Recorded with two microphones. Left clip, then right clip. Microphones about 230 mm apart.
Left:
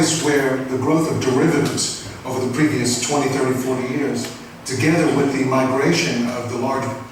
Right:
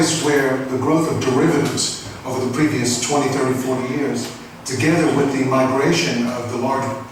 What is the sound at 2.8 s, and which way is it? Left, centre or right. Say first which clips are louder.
Speech: even; centre.